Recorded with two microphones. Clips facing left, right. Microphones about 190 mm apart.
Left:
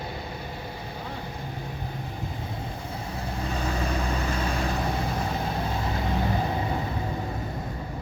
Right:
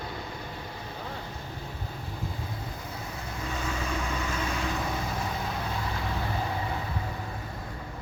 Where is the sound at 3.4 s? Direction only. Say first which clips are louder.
Left 4 dB; 35° left (ahead or behind).